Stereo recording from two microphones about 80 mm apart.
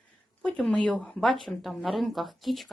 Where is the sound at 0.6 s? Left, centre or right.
Centre.